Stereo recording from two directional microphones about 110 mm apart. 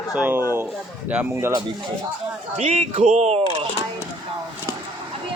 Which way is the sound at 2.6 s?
70° right (ahead or behind).